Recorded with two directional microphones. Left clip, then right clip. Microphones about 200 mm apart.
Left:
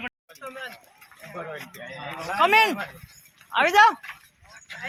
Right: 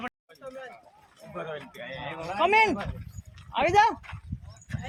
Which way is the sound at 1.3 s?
30° left (ahead or behind).